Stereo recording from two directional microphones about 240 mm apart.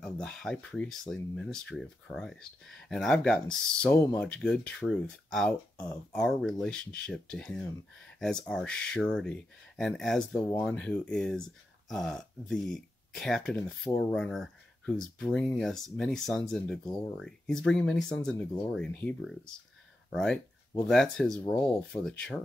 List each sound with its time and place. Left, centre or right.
0.0 s speech: centre